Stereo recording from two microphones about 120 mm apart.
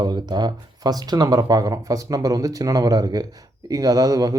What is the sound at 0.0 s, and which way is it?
Speech, 35° right (ahead or behind).